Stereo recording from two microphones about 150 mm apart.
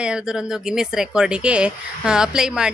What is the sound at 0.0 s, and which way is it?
Speech, 5° right (ahead or behind).